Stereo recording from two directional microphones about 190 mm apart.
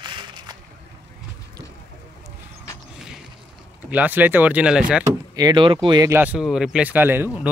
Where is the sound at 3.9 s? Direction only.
10° right (ahead or behind).